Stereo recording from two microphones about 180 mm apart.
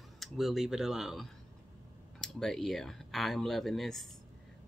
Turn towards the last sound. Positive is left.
turn(degrees=0)  # may be behind; listen again after turning